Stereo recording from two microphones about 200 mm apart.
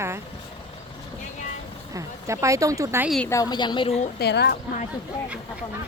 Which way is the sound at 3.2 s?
15° left (ahead or behind).